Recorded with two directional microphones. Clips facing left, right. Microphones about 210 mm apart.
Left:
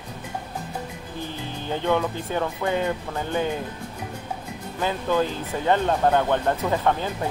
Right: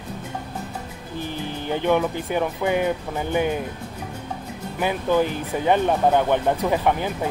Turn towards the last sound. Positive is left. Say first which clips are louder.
# right 2 dB
turn(degrees=-15)  # may be behind; listen again after turning